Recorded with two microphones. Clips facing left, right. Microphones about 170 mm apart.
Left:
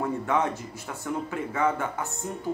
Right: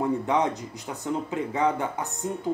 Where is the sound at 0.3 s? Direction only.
15° right (ahead or behind).